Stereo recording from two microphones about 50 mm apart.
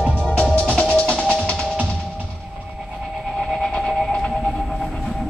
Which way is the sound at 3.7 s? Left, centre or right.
Centre.